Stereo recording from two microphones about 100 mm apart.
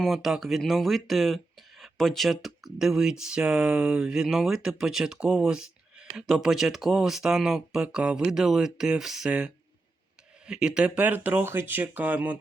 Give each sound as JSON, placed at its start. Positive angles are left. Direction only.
{"t": 0.0, "sound": "speech", "side_deg": -5}